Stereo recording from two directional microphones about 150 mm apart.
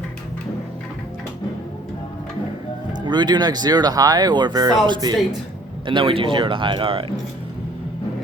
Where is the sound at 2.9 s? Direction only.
30° right (ahead or behind).